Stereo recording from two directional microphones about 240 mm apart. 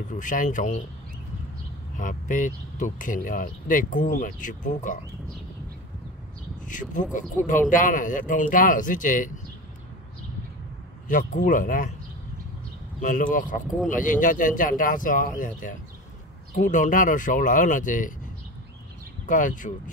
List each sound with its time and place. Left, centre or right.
0.1 s speech: left
2.0 s speech: left
6.6 s speech: left
11.1 s speech: left
13.0 s speech: left
19.2 s speech: left